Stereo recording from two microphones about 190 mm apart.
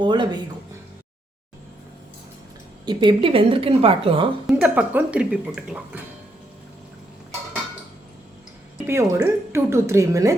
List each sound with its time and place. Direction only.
0.0 s a sound: 25° right (ahead or behind)
2.8 s a woman's voice: 25° right (ahead or behind)
4.4 s speech: 5° right (ahead or behind)
8.9 s speech: 15° right (ahead or behind)